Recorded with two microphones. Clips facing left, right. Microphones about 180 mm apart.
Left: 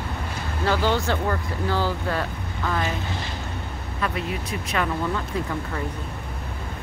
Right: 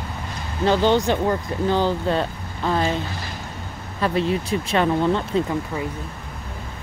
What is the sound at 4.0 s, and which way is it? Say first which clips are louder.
Speech: right 7 dB; 30° right (ahead or behind).